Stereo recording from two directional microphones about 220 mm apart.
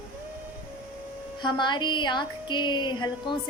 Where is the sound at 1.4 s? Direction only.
20° left (ahead or behind).